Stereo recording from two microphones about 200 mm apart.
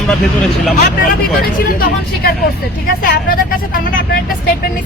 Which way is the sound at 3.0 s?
45° left (ahead or behind).